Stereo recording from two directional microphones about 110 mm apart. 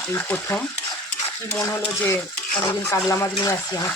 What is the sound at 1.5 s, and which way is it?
Speech, 25° left (ahead or behind).